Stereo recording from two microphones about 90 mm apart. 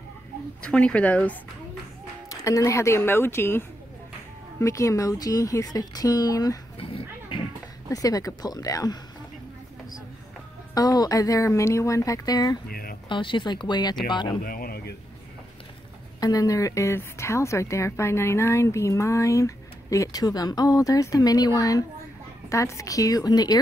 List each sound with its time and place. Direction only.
0.6 s speech: 10° left (ahead or behind)
2.2 s a woman's voice: 35° left (ahead or behind)
6.8 s a sound: 90° left
7.9 s a woman's voice: 40° left (ahead or behind)
10.7 s a woman's voice: 45° left (ahead or behind)
13.1 s speech: 65° left (ahead or behind)
16.2 s a woman's voice: 40° left (ahead or behind)